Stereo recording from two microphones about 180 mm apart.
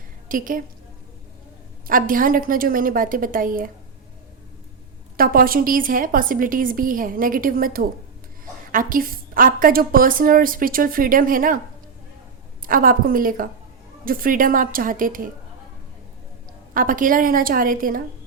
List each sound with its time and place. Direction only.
0.3 s a woman's voice: 50° right (ahead or behind)
1.9 s a woman's voice: 50° right (ahead or behind)
5.1 s a woman's voice: 55° right (ahead or behind)
12.6 s a woman's voice: 50° right (ahead or behind)
16.7 s a woman's voice: 50° right (ahead or behind)